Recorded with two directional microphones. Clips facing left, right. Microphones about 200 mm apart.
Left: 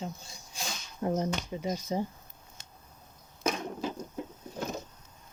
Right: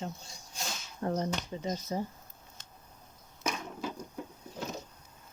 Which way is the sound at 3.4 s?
30° left (ahead or behind).